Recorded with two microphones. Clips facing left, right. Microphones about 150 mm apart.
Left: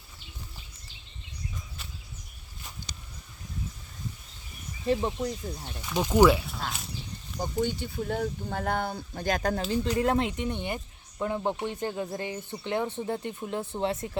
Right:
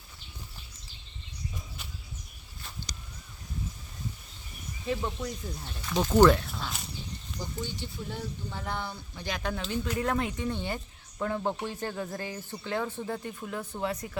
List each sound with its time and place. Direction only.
5.0 s speech: 30° left (ahead or behind)
5.8 s speech: 10° left (ahead or behind)
7.3 s speech: 55° left (ahead or behind); by 14.2 s 25° left (ahead or behind)